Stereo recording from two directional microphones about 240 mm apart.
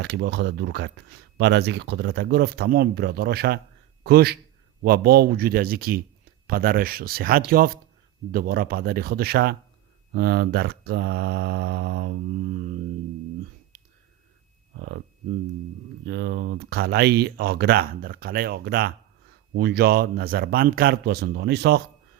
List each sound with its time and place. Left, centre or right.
0.0 s speech: right
16.0 s speech: right